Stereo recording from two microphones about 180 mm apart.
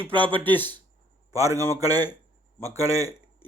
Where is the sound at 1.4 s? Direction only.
20° right (ahead or behind).